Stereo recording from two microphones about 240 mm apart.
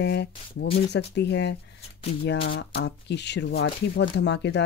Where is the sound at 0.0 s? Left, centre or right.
Left.